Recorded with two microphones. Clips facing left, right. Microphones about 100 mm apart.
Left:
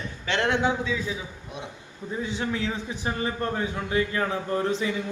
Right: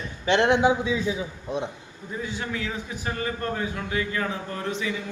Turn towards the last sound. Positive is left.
turn(degrees=35)  # may be behind; listen again after turning